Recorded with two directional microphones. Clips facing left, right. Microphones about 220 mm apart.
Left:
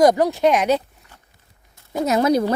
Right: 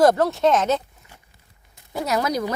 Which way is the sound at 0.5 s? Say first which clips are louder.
Left 2 dB; 15° left (ahead or behind).